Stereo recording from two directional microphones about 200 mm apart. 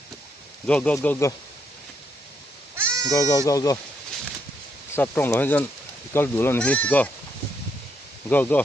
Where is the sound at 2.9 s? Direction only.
15° right (ahead or behind).